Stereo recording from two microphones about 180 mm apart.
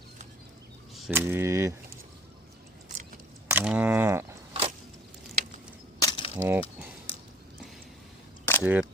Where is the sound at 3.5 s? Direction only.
10° right (ahead or behind).